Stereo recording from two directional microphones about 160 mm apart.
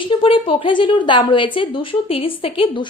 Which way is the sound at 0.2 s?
35° left (ahead or behind).